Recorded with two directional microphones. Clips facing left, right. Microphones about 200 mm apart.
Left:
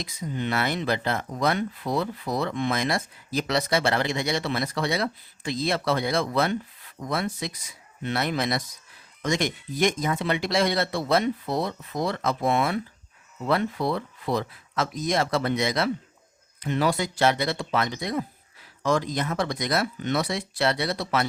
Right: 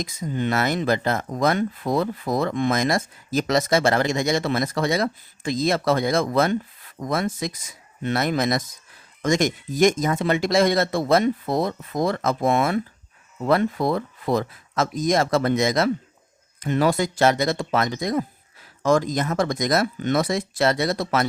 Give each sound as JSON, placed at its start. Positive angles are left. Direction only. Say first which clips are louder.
{"t": 0.0, "sound": "speech", "louder": "right 4 dB", "side_deg": -45}